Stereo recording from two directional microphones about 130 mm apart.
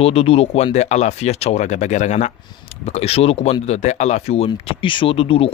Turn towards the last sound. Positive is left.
turn(degrees=45)  # may be behind; listen again after turning